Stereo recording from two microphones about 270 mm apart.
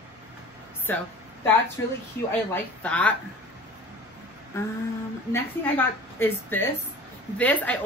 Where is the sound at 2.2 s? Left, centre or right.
Left.